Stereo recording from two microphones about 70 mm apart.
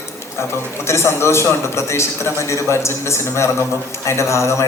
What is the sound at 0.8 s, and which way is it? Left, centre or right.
A man's voice, left.